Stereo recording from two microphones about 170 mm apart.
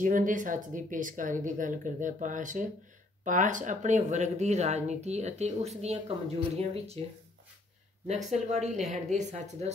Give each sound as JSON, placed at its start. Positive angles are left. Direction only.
{"t": 0.0, "sound": "speech", "side_deg": -50}
{"t": 8.1, "sound": "speech", "side_deg": -45}